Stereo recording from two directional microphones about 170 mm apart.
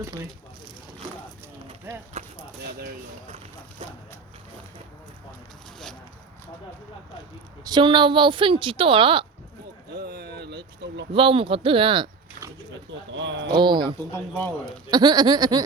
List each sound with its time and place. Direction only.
1.9 s speech: 10° right (ahead or behind)
7.7 s a woman's voice: 30° right (ahead or behind)
10.1 s a sound: 70° right (ahead or behind)
11.1 s speech: 30° right (ahead or behind)
13.1 s speech: 90° right
13.5 s a woman's voice: 25° right (ahead or behind)
14.1 s speech: 10° left (ahead or behind)
14.8 s a woman's voice: 25° right (ahead or behind)